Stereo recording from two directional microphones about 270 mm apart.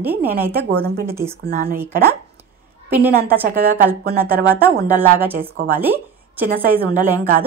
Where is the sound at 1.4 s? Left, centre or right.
Right.